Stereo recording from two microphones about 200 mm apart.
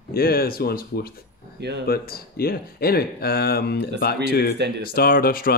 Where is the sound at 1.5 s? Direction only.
55° right (ahead or behind).